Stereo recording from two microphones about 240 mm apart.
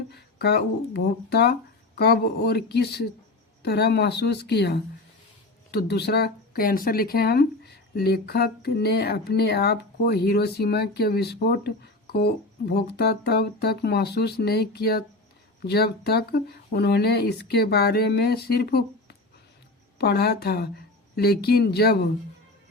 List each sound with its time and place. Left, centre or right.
0.1 s speech: left